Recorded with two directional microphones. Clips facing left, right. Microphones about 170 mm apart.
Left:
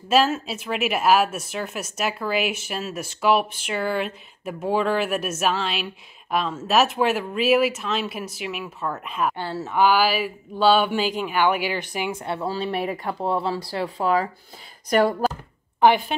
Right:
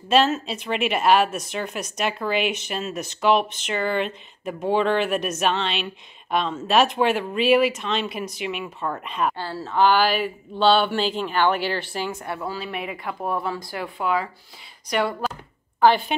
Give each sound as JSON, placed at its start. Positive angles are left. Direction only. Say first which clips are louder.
{"t": 0.1, "sound": "speech", "louder": "even", "side_deg": 5}
{"t": 9.4, "sound": "speech", "louder": "left 2 dB", "side_deg": 20}
{"t": 9.8, "sound": "speech", "louder": "even", "side_deg": 10}
{"t": 12.4, "sound": "speech", "louder": "left 7 dB", "side_deg": 35}
{"t": 13.2, "sound": "speech", "louder": "left 2 dB", "side_deg": 30}
{"t": 15.8, "sound": "a woman's voice", "louder": "even", "side_deg": 25}